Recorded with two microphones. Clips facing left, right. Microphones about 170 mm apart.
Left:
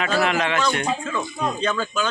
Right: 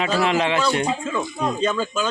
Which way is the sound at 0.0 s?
30° right (ahead or behind).